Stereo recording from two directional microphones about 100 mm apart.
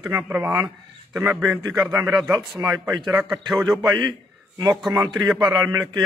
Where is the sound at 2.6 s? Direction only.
30° right (ahead or behind).